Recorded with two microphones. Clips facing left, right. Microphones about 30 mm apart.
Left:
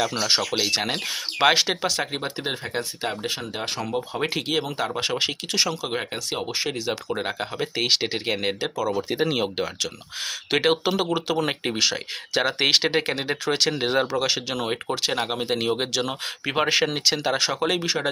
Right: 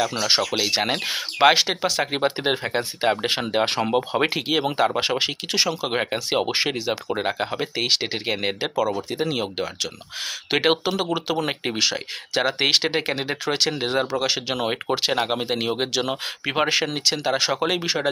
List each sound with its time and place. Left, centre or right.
0.0 s speech: centre
0.7 s speech: centre
2.1 s speech: right
3.2 s speech: right
3.5 s speech: right
4.4 s speech: centre
4.6 s speech: right
6.8 s speech: centre
8.7 s speech: centre
9.0 s speech: centre
10.5 s speech: centre
10.8 s speech: centre
14.5 s speech: centre
17.3 s speech: centre